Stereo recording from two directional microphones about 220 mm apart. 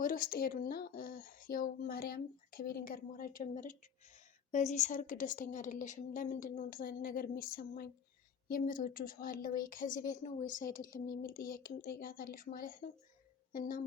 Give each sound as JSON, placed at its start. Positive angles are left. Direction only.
{"t": 0.0, "sound": "speech", "side_deg": 40}